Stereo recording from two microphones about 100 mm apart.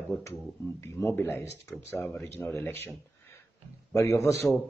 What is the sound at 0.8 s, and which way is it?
Speech, 30° left (ahead or behind).